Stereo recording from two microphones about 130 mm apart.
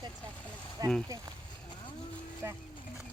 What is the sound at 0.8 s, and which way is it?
Speech, 30° right (ahead or behind).